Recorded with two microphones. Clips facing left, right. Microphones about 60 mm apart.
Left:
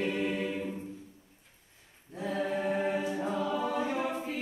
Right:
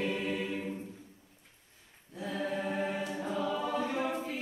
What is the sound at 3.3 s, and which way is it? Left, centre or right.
Choir, left.